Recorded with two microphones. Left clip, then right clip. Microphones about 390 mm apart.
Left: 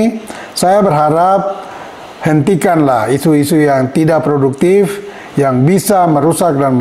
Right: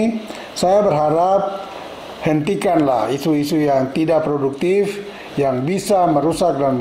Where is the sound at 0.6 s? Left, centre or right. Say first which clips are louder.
Left 5 dB; left.